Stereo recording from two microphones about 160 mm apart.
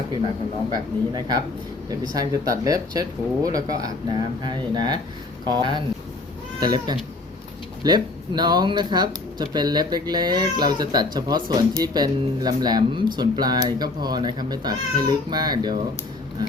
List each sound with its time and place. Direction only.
0.7 s speech: 25° right (ahead or behind)